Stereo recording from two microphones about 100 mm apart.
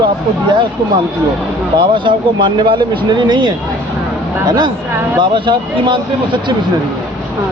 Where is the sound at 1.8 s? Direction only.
55° right (ahead or behind).